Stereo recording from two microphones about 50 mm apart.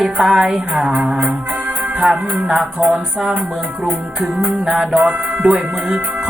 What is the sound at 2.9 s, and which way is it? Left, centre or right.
Music, centre.